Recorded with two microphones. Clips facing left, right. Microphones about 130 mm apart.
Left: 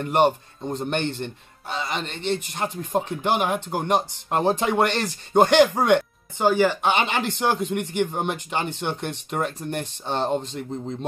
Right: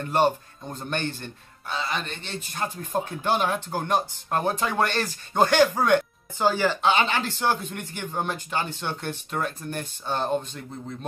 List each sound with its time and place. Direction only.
0.0 s speech: 20° left (ahead or behind)